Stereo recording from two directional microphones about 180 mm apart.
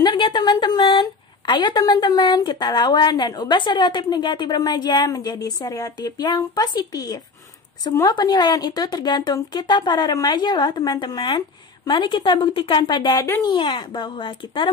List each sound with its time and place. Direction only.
0.0 s a woman's voice: 25° left (ahead or behind)